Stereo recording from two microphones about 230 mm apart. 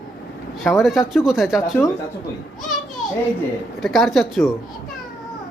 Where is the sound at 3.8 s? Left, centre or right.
Centre.